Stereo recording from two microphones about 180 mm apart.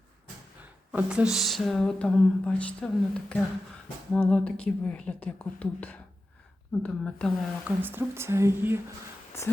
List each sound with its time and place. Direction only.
0.9 s speech: 5° right (ahead or behind)
7.8 s speech: 10° right (ahead or behind)
9.3 s speech: 15° left (ahead or behind)